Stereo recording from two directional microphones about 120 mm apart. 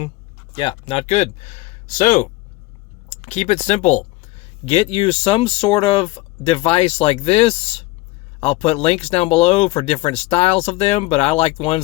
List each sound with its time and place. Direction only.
0.5 s speech: 45° left (ahead or behind); by 2.3 s 90° left
3.1 s speech: 70° left (ahead or behind); by 11.8 s 55° left (ahead or behind)